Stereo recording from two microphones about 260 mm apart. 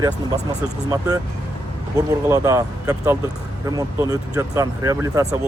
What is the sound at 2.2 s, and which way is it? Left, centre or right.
Speech, centre.